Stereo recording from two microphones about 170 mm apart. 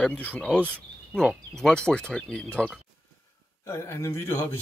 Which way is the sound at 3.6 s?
15° left (ahead or behind).